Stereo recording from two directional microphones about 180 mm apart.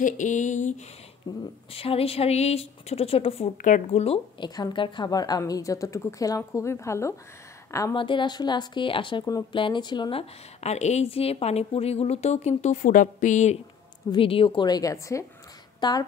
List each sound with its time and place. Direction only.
0.0 s a sound: 45° left (ahead or behind)
1.7 s speech: 30° left (ahead or behind)
10.6 s a woman's voice: 40° left (ahead or behind)
14.1 s speech: 30° left (ahead or behind)